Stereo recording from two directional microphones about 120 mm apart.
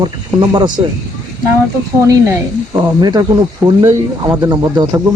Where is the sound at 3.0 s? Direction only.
35° right (ahead or behind).